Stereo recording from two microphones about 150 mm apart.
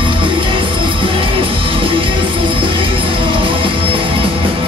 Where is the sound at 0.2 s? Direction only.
35° right (ahead or behind).